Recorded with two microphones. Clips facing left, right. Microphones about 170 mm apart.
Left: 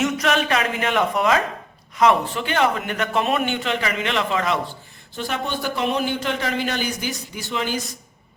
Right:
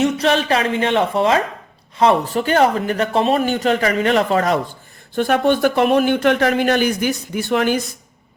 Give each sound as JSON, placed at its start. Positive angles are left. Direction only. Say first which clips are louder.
{"t": 0.0, "sound": "a man's voice", "louder": "right 4 dB", "side_deg": -30}
{"t": 5.1, "sound": "a man's voice", "louder": "right 11 dB", "side_deg": -55}